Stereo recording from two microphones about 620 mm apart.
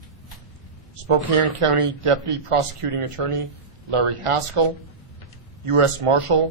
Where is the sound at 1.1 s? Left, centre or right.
Right.